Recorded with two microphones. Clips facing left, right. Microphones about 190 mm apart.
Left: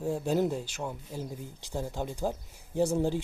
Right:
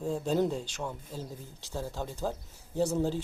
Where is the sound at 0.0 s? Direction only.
10° left (ahead or behind).